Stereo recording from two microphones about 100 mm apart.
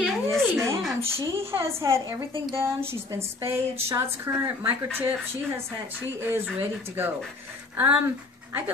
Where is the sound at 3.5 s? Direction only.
30° right (ahead or behind).